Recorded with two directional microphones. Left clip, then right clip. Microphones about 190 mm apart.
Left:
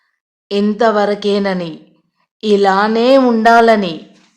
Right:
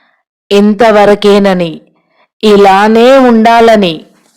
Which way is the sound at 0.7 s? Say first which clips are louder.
Right 8 dB; 40° right (ahead or behind).